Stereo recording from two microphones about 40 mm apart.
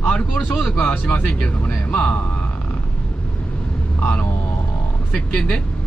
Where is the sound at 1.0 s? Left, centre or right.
Left.